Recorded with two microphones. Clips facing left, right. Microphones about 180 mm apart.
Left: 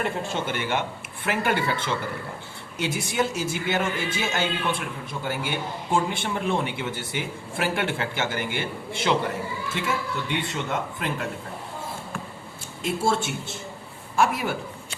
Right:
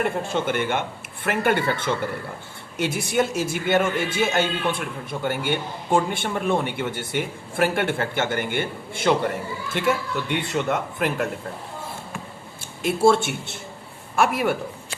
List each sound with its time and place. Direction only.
0.0 s a man's voice: 50° right (ahead or behind)
9.7 s a man's voice: 60° right (ahead or behind)
12.8 s a man's voice: 65° right (ahead or behind)